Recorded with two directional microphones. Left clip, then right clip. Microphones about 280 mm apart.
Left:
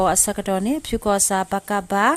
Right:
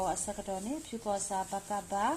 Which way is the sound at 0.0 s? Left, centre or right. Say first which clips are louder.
Left 15 dB; left.